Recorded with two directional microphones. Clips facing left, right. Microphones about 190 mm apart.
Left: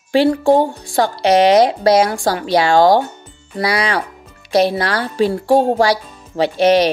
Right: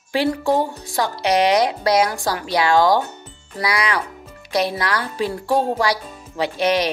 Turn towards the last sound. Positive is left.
turn(degrees=30)  # may be behind; listen again after turning